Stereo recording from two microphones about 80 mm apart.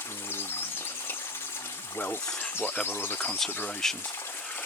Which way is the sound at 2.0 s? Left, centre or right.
Left.